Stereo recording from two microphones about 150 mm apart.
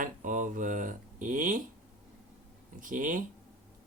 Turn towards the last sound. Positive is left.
turn(degrees=-60)  # may be behind; listen again after turning